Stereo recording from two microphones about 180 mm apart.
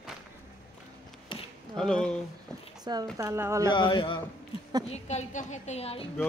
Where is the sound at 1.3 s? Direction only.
30° left (ahead or behind).